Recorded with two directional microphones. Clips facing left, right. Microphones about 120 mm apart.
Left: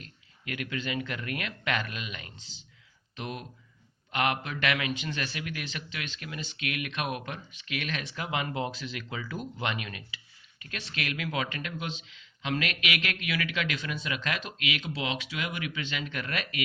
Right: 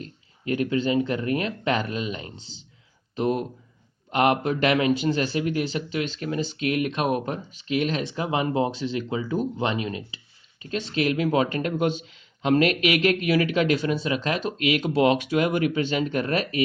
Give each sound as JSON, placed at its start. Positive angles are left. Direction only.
{"t": 0.0, "sound": "speech", "side_deg": -30}